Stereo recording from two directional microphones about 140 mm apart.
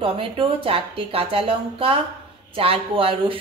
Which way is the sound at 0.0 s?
40° right (ahead or behind).